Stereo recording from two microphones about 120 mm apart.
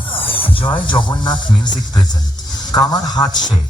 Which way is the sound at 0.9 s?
40° left (ahead or behind).